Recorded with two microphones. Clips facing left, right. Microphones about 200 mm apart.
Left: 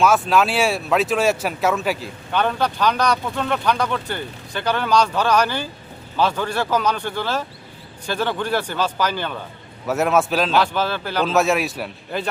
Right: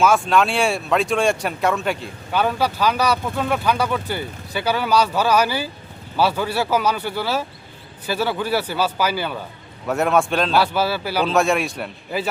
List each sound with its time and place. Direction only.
0.0 s speech: centre (ahead or behind)
9.8 s a man's voice: 5° left (ahead or behind)
10.6 s speech: 10° right (ahead or behind)
11.3 s a man's voice: centre (ahead or behind)